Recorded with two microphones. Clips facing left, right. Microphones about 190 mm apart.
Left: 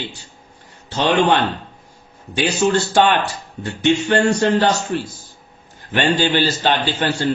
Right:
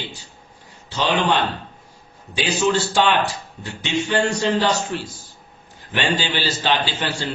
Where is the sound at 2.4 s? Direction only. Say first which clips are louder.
Left 3 dB; 50° left (ahead or behind).